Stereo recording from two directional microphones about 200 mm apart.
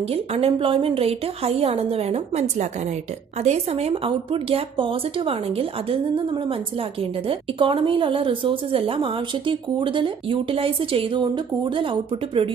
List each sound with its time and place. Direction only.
0.0 s speech: 30° right (ahead or behind)